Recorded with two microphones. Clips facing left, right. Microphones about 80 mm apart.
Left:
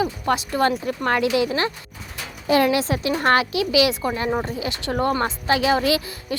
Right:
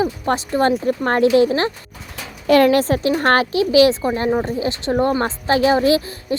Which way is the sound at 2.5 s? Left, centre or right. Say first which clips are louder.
Right 5 dB; right.